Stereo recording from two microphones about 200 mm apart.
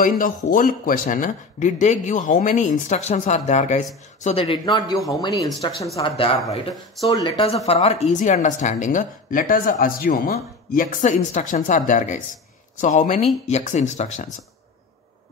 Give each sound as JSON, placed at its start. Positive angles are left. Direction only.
{"t": 0.0, "sound": "speech", "side_deg": 45}
{"t": 7.6, "sound": "speech", "side_deg": 30}